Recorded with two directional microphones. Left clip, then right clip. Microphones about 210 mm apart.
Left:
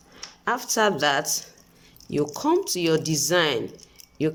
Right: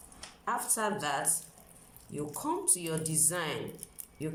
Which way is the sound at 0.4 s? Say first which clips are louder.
Left 10 dB; 45° left (ahead or behind).